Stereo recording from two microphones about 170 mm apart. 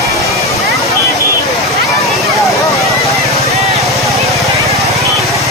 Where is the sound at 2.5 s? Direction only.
20° left (ahead or behind).